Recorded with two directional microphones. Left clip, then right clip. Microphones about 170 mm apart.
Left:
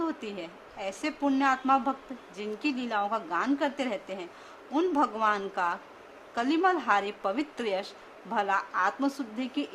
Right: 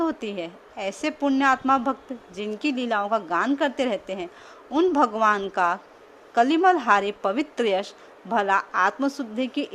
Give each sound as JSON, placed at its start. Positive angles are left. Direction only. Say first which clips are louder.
{"t": 0.0, "sound": "a woman's voice", "louder": "right 7 dB", "side_deg": -40}